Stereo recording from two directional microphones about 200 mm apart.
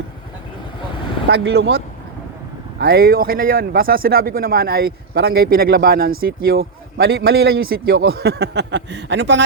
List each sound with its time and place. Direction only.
1.3 s a man's voice: 60° right (ahead or behind)